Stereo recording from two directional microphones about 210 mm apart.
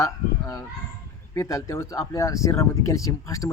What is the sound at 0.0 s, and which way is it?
Fowl, 15° left (ahead or behind).